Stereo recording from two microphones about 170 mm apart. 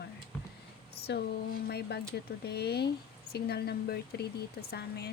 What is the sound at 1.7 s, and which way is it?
Speech, 70° left (ahead or behind).